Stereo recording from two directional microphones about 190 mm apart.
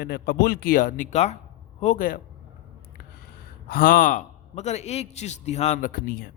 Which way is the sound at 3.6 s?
50° left (ahead or behind).